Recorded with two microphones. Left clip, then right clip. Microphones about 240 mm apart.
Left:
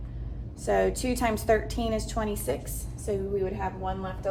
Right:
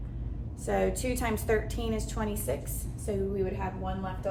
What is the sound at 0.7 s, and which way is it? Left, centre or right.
A woman's voice, left.